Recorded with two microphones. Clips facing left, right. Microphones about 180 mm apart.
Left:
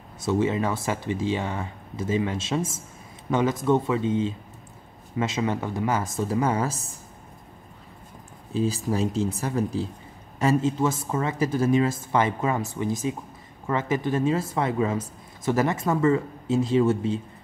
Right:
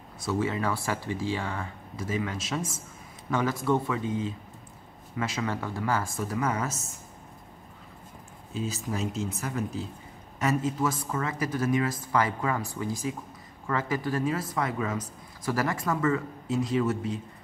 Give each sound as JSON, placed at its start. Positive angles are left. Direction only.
{"t": 0.2, "sound": "speech", "side_deg": 25}
{"t": 8.5, "sound": "speech", "side_deg": 35}